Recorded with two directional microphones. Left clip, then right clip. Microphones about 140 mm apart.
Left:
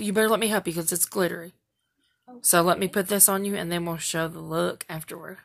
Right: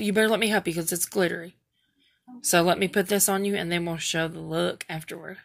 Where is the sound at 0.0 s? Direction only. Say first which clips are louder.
Even; 15° left (ahead or behind).